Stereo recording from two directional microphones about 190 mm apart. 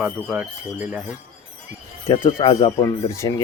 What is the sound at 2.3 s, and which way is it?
Speech, 20° left (ahead or behind).